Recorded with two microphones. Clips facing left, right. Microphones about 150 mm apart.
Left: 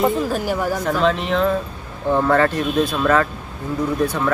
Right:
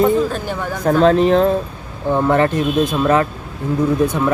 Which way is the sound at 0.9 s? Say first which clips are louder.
Right 10 dB; 40° right (ahead or behind).